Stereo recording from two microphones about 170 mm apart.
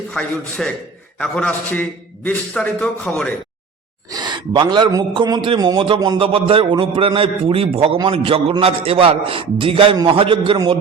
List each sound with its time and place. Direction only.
0.1 s a man's voice: 5° left (ahead or behind)
4.1 s a man's voice: 25° right (ahead or behind)